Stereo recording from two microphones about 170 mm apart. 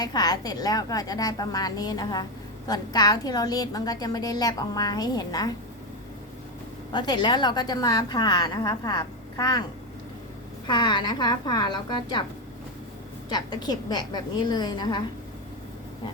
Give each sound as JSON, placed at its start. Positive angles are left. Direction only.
{"t": 0.0, "sound": "a woman's voice", "side_deg": 25}
{"t": 6.9, "sound": "a woman's voice", "side_deg": 25}
{"t": 10.7, "sound": "a woman's voice", "side_deg": 25}
{"t": 13.3, "sound": "a woman's voice", "side_deg": 25}